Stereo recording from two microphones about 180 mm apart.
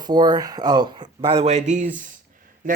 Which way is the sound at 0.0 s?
20° right (ahead or behind).